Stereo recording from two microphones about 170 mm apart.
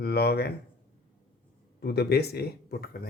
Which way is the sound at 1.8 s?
70° left (ahead or behind).